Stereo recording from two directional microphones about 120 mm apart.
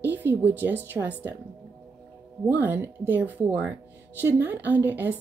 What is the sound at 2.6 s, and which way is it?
A woman's voice, 15° right (ahead or behind).